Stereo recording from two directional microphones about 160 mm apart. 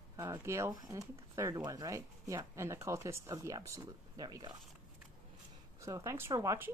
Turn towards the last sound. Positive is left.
turn(degrees=-20)  # may be behind; listen again after turning